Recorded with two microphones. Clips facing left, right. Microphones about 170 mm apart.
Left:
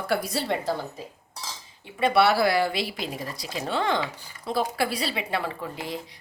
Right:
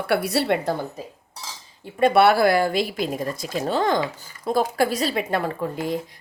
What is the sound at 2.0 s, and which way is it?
Speech, 50° right (ahead or behind).